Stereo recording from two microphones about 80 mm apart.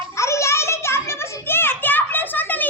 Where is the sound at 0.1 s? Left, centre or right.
Left.